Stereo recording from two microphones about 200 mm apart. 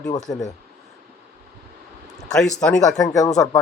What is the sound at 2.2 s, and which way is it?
Speech, 5° left (ahead or behind).